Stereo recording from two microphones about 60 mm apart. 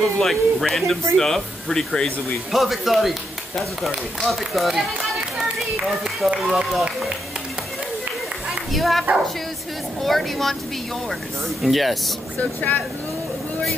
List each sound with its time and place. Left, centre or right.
0.0 s speech: centre
8.7 s speech: centre
10.0 s speech: centre
11.6 s speech: centre
12.4 s speech: left